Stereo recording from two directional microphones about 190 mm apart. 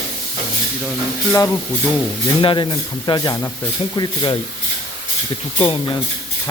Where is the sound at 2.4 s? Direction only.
25° left (ahead or behind).